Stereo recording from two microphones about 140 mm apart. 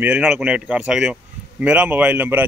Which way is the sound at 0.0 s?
10° right (ahead or behind).